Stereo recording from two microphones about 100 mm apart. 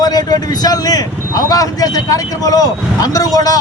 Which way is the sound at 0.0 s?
40° left (ahead or behind).